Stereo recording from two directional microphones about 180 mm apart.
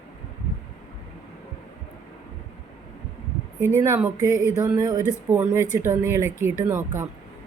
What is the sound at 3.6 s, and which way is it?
Speech, 15° right (ahead or behind).